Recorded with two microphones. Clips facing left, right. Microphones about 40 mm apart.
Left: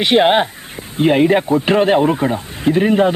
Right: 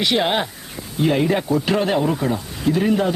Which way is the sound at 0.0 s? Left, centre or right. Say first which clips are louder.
Left 7 dB; left.